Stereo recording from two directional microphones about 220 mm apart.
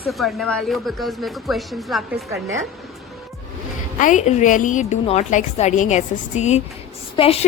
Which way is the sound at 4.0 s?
35° left (ahead or behind).